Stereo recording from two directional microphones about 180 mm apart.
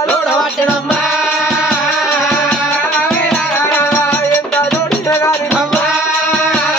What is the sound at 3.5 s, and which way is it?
Music, 10° left (ahead or behind).